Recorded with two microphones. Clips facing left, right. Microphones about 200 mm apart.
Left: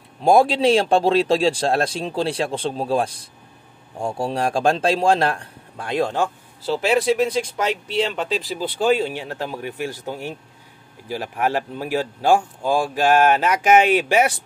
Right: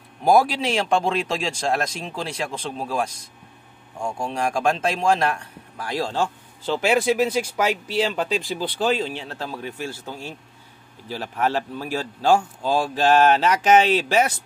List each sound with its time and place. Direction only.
0.2 s speech: 25° left (ahead or behind)
6.6 s a man's voice: centre (ahead or behind)